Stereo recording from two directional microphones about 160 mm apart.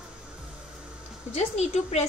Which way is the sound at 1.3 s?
45° left (ahead or behind).